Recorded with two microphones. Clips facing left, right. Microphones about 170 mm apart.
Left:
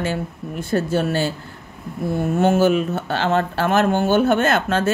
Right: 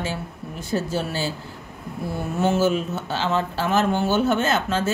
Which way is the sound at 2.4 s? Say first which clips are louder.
Left 3 dB; 60° left (ahead or behind).